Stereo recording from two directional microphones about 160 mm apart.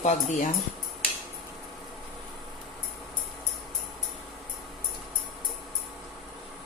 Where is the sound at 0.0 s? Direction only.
45° left (ahead or behind).